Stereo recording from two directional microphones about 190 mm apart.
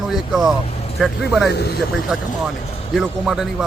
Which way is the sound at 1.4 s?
60° left (ahead or behind).